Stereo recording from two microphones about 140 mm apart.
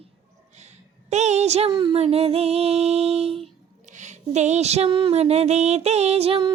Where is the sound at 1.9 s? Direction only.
45° right (ahead or behind).